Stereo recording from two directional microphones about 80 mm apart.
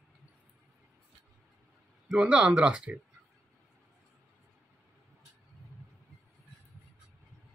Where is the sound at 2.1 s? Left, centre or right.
Centre.